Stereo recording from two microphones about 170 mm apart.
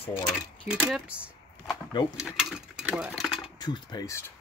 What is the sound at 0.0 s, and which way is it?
Speech, 30° left (ahead or behind).